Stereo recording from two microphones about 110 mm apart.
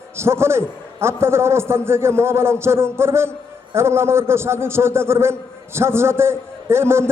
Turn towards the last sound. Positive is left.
turn(degrees=-25)  # may be behind; listen again after turning